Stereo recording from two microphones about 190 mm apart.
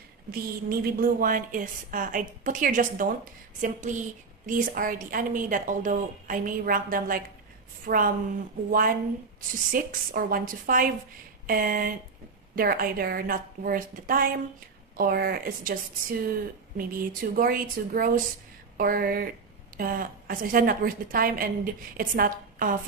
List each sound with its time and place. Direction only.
0.3 s a woman's voice: 50° right (ahead or behind)